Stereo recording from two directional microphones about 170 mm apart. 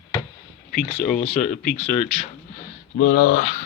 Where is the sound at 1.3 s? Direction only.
45° left (ahead or behind).